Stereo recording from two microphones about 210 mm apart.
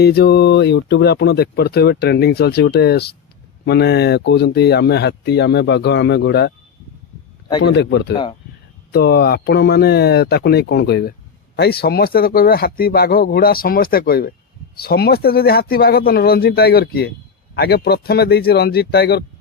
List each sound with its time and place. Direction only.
0.0 s speech: 50° left (ahead or behind)
7.6 s speech: 55° left (ahead or behind)
8.1 s speech: 20° left (ahead or behind)
8.9 s speech: 50° left (ahead or behind)